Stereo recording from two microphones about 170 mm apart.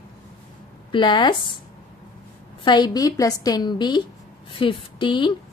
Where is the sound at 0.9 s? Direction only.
30° left (ahead or behind).